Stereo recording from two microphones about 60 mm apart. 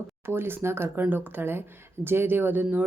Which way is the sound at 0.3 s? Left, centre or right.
Right.